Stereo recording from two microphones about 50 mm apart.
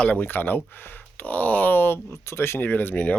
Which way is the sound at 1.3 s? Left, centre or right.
Left.